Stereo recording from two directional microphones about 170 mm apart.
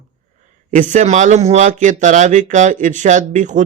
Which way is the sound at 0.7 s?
50° right (ahead or behind).